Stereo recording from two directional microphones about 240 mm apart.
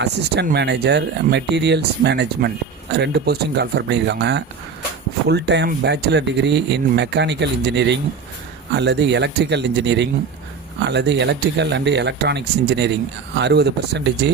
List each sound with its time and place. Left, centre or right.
0.0 s speech: right